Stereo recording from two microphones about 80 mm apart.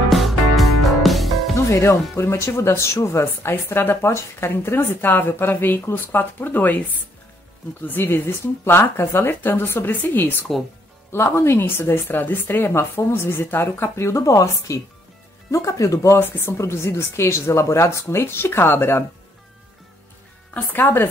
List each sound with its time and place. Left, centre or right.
0.1 s music: centre
1.7 s speech: left
7.8 s speech: left
16.2 s speech: left
20.5 s speech: left